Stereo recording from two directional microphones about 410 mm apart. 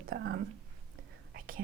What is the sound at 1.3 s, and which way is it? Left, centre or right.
Whispering, right.